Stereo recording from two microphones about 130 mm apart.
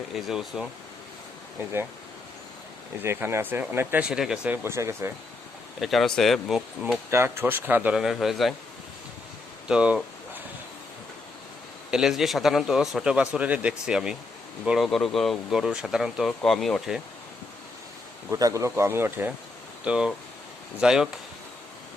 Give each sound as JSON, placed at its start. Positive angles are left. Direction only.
{"t": 0.1, "sound": "a man's voice", "side_deg": -5}
{"t": 3.0, "sound": "speech", "side_deg": -20}
{"t": 5.8, "sound": "a man's voice", "side_deg": 0}
{"t": 7.1, "sound": "speech", "side_deg": -20}
{"t": 9.6, "sound": "a sound", "side_deg": -10}
{"t": 11.9, "sound": "a man's voice", "side_deg": -5}
{"t": 18.3, "sound": "a man's voice", "side_deg": -25}